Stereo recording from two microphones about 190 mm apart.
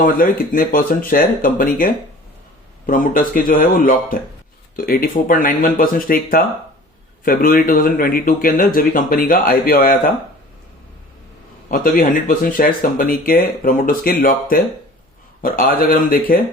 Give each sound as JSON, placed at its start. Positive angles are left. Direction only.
{"t": 0.0, "sound": "speech", "side_deg": 45}
{"t": 11.7, "sound": "speech", "side_deg": 50}